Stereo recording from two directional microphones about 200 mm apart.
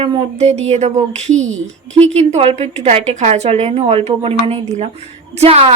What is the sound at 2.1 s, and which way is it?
A woman's voice, 30° right (ahead or behind).